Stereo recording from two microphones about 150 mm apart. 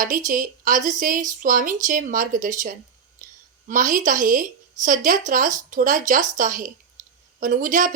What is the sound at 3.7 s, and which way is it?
A woman's voice, 60° right (ahead or behind).